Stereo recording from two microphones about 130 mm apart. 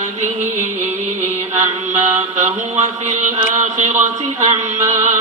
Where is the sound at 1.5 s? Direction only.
65° right (ahead or behind).